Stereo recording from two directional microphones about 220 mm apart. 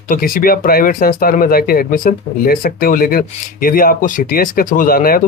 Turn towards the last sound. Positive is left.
turn(degrees=40)  # may be behind; listen again after turning